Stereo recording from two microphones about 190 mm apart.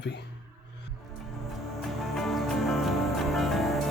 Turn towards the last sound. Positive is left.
turn(degrees=0)  # may be behind; listen again after turning